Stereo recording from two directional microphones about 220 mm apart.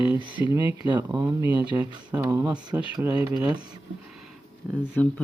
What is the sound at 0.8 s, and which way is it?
Speech, 20° right (ahead or behind).